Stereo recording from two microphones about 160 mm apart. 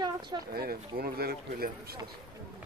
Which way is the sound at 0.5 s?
70° right (ahead or behind).